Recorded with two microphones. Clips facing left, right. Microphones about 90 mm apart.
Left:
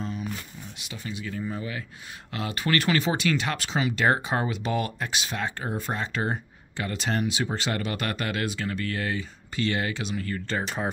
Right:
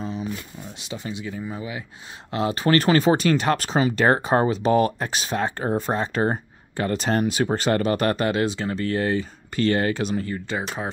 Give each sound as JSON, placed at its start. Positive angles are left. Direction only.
{"t": 0.0, "sound": "a sound", "side_deg": -25}
{"t": 0.7, "sound": "speech", "side_deg": -25}
{"t": 2.3, "sound": "speech", "side_deg": -30}
{"t": 10.2, "sound": "speech", "side_deg": -15}